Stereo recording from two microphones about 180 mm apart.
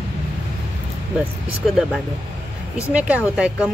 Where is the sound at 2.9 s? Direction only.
10° right (ahead or behind).